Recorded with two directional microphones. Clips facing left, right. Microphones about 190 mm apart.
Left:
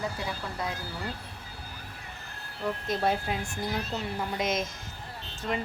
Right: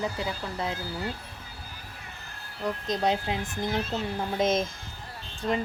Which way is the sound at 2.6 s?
20° right (ahead or behind).